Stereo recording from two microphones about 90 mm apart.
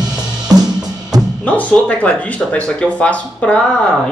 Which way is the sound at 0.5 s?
45° right (ahead or behind).